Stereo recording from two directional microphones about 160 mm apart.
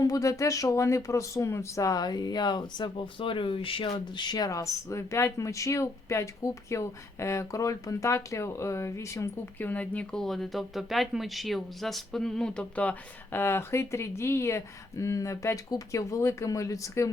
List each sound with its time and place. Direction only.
0.0 s speech: 20° left (ahead or behind)